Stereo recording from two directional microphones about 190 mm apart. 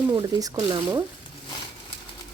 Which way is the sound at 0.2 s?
20° right (ahead or behind).